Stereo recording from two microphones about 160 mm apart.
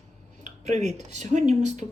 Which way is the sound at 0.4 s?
45° right (ahead or behind).